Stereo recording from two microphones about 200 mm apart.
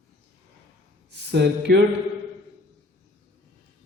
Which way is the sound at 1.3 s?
55° right (ahead or behind).